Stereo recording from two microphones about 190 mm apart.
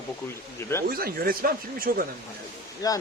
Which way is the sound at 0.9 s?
50° right (ahead or behind).